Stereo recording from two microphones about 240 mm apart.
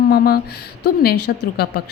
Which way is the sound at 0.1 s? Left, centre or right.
Left.